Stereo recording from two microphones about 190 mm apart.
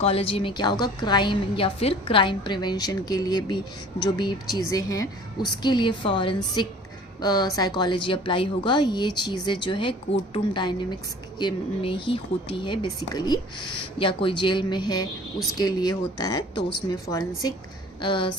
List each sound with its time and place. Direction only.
0.0 s a woman's voice: 30° left (ahead or behind)